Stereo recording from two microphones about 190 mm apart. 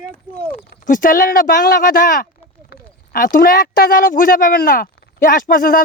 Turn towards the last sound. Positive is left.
turn(degrees=45)  # may be behind; listen again after turning